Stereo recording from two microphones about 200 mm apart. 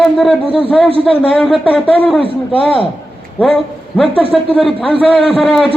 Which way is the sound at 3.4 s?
Centre (ahead or behind).